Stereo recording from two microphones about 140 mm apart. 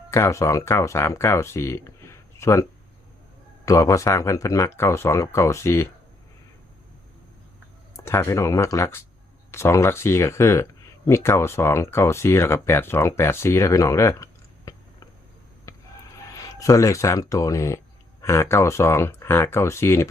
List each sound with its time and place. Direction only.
0.1 s speech: 20° left (ahead or behind)
3.7 s speech: 20° left (ahead or behind)
7.9 s speech: 15° left (ahead or behind)
15.7 s a sound: 20° left (ahead or behind)
16.3 s speech: 25° left (ahead or behind)